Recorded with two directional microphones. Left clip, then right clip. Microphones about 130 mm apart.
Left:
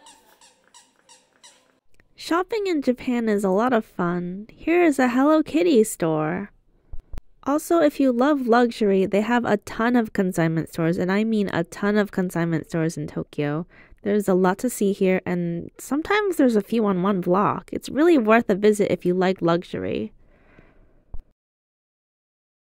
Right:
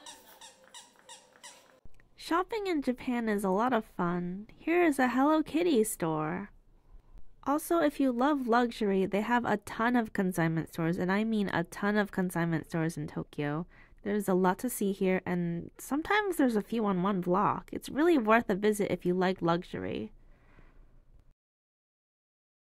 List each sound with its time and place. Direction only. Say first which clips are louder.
2.1 s speech: left 8 dB; 45° left (ahead or behind)